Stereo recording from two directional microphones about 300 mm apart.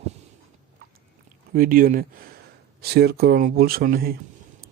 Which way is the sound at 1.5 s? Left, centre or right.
Right.